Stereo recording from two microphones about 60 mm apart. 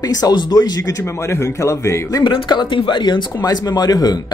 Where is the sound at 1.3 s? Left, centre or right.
Left.